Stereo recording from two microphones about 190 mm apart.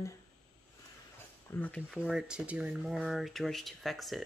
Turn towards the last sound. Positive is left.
turn(degrees=0)  # may be behind; listen again after turning